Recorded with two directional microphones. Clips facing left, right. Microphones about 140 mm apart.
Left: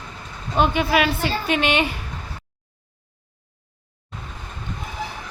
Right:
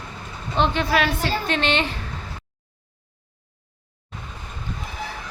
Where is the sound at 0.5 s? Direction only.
10° left (ahead or behind).